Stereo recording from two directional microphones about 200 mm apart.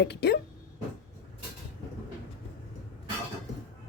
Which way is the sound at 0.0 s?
55° left (ahead or behind).